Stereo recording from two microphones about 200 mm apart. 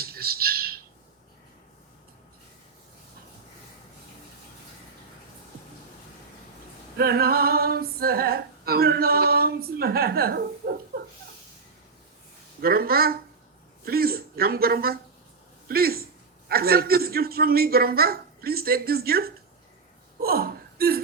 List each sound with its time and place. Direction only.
0.0 s squawk: 50° right (ahead or behind)
6.9 s female singing: 50° right (ahead or behind)
12.6 s female singing: 50° right (ahead or behind)
20.2 s hiccup: 50° right (ahead or behind)